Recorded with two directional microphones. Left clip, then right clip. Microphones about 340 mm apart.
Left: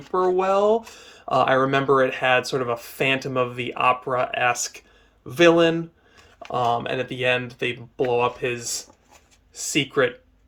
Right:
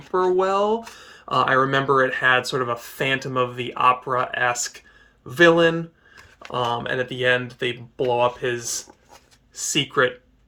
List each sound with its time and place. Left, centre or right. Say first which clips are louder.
0.1 s speech: even; centre